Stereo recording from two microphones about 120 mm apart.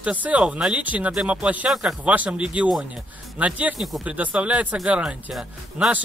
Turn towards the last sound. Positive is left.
turn(degrees=-5)  # may be behind; listen again after turning